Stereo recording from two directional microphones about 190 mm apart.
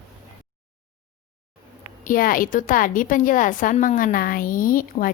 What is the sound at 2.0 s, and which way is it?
Speech, 45° left (ahead or behind).